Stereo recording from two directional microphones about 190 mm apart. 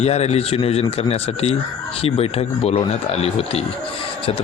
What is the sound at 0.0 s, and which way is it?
A man's voice, 35° left (ahead or behind).